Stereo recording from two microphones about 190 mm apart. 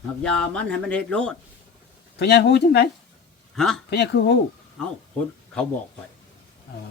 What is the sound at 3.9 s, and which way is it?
Speech, 60° left (ahead or behind).